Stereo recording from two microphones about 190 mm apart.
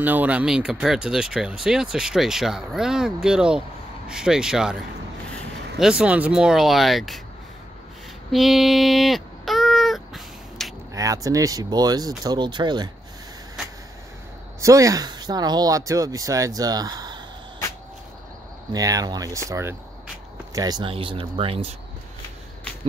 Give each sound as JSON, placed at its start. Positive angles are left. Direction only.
{"t": 0.0, "sound": "speech", "side_deg": -10}
{"t": 5.8, "sound": "speech", "side_deg": -5}
{"t": 8.3, "sound": "a sound", "side_deg": 0}
{"t": 10.9, "sound": "speech", "side_deg": -15}
{"t": 14.6, "sound": "speech", "side_deg": -15}
{"t": 18.7, "sound": "speech", "side_deg": -20}